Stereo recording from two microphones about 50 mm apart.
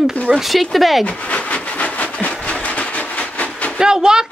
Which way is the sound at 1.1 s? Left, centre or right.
Left.